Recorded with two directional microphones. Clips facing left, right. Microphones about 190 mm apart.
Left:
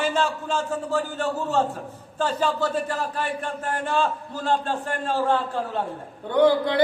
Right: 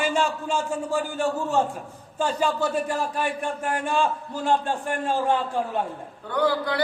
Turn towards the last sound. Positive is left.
turn(degrees=20)  # may be behind; listen again after turning